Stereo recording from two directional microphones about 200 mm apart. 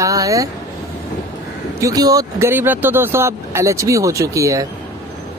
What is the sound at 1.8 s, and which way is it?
Speech, 15° right (ahead or behind).